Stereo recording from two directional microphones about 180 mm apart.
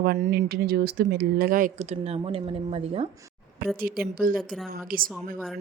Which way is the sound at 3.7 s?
55° right (ahead or behind).